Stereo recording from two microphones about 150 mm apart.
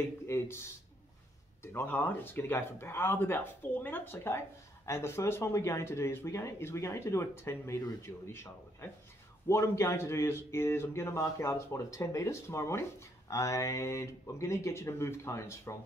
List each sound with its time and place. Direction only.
0.3 s speech: 15° left (ahead or behind)